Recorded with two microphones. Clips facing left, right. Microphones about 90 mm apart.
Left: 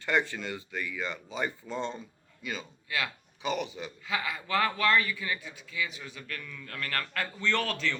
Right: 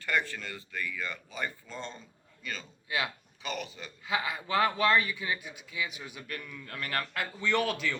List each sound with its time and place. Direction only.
0.0 s a man's voice: 20° left (ahead or behind)
2.9 s a man's voice: 20° right (ahead or behind)
3.4 s a man's voice: 20° left (ahead or behind)
4.0 s a man's voice: 20° right (ahead or behind)